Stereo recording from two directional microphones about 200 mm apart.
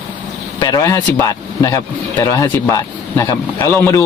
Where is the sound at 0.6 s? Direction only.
20° left (ahead or behind).